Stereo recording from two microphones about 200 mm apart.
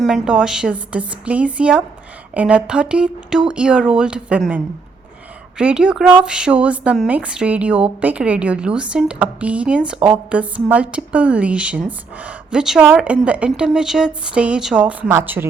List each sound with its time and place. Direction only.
0.0 s speech: 5° right (ahead or behind)